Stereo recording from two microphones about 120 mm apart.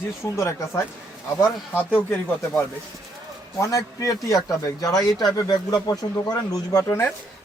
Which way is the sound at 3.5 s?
25° left (ahead or behind).